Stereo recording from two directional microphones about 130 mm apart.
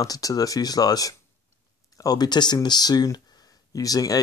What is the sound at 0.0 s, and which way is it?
Speech, 30° left (ahead or behind).